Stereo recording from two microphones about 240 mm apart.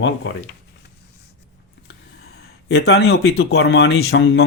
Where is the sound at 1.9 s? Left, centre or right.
Left.